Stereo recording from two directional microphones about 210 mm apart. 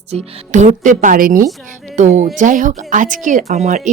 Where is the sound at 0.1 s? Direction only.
35° right (ahead or behind).